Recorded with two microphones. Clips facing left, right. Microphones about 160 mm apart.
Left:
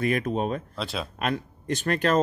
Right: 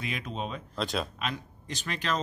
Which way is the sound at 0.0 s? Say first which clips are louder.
Left 10 dB; 50° left (ahead or behind).